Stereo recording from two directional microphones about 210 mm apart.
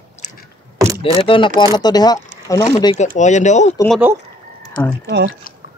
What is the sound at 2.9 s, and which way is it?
Speech, 35° left (ahead or behind).